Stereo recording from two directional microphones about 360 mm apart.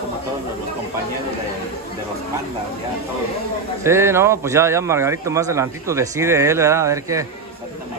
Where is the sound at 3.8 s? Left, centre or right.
Centre.